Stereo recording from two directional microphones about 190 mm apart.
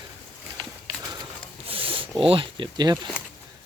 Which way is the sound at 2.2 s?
30° right (ahead or behind).